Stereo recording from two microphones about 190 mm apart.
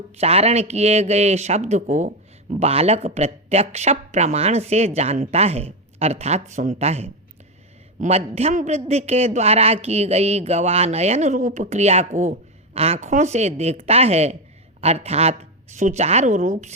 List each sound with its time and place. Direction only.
0.2 s a man's voice: 35° right (ahead or behind)